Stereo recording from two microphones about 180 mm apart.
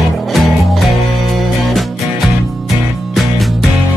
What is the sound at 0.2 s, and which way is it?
Music, centre (ahead or behind).